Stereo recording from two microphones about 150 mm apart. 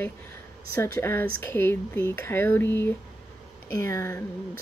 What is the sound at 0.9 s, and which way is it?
Speech, 15° left (ahead or behind).